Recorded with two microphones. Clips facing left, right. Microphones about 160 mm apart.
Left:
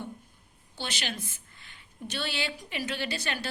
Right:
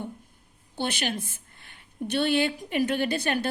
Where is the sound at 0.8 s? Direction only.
55° right (ahead or behind).